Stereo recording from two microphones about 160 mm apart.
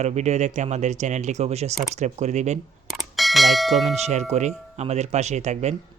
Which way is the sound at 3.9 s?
45° right (ahead or behind).